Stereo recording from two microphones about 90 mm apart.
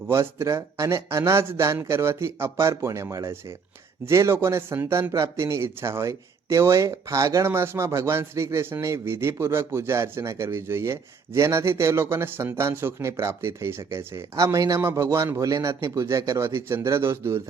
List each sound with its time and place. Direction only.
0.1 s speech: 35° right (ahead or behind)